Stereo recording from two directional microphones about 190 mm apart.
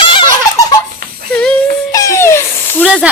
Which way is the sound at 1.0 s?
50° right (ahead or behind).